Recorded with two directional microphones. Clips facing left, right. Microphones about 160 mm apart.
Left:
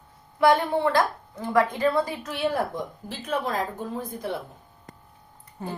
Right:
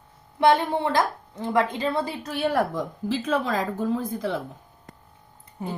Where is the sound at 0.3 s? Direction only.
25° right (ahead or behind).